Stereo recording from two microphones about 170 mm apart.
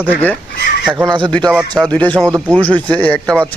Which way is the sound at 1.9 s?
5° left (ahead or behind).